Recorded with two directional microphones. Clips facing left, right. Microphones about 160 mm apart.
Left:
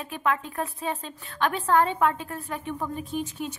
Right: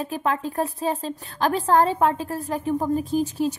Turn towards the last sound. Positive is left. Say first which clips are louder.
# right 8 dB
turn(degrees=-35)  # may be behind; listen again after turning